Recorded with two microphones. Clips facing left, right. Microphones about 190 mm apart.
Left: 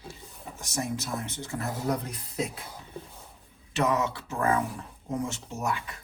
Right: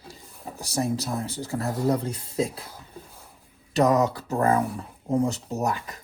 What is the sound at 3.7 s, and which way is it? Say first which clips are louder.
Speech: right 6 dB; 35° right (ahead or behind).